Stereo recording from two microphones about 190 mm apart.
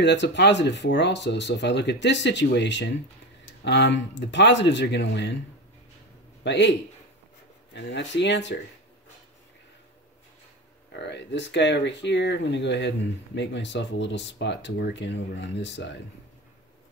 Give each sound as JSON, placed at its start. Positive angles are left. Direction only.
{"t": 0.0, "sound": "speech", "side_deg": 65}
{"t": 6.4, "sound": "a man's voice", "side_deg": 70}
{"t": 7.7, "sound": "speech", "side_deg": 70}
{"t": 10.9, "sound": "speech", "side_deg": 65}